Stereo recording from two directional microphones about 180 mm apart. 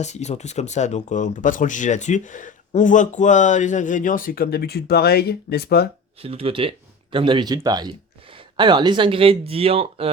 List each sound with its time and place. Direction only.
0.0 s speech: 40° left (ahead or behind); by 5.9 s 60° left (ahead or behind)
6.2 s speech: 30° right (ahead or behind)